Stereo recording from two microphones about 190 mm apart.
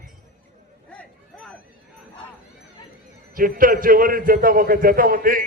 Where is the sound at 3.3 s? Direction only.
45° right (ahead or behind).